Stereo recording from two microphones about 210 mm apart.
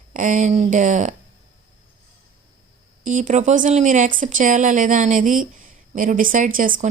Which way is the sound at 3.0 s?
40° right (ahead or behind).